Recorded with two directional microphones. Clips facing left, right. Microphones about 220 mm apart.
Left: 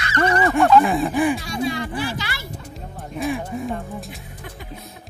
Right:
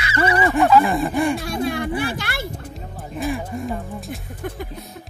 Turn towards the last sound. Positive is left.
turn(degrees=0)  # may be behind; listen again after turning